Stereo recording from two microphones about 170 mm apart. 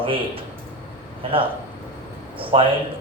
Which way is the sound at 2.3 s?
30° right (ahead or behind).